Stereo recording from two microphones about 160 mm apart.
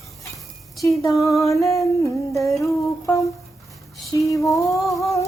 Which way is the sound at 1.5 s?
20° left (ahead or behind).